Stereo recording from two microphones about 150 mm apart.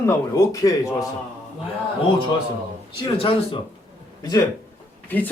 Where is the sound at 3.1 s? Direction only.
40° left (ahead or behind).